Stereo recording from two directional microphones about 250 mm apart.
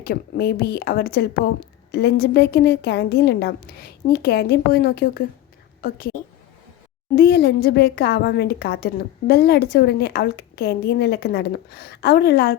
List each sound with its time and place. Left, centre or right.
0.0 s a woman's voice: left
7.2 s a woman's voice: left